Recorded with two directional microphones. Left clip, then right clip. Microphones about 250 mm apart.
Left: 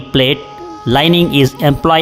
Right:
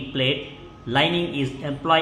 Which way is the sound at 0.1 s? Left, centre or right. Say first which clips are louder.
Left 11 dB; left.